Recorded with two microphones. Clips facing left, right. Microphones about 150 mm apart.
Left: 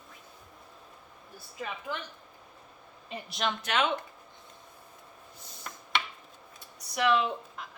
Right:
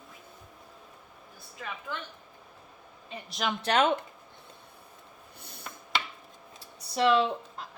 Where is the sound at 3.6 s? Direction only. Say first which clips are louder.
Right 6 dB; 40° right (ahead or behind).